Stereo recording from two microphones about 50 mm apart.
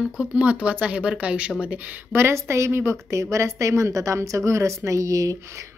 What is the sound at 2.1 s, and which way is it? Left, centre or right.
Speech, right.